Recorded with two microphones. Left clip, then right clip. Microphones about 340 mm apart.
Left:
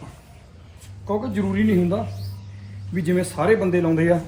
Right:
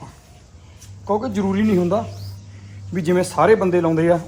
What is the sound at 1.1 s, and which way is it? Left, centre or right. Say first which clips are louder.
Speech: right 4 dB; centre.